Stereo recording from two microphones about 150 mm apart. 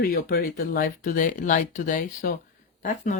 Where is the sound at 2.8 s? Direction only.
55° left (ahead or behind).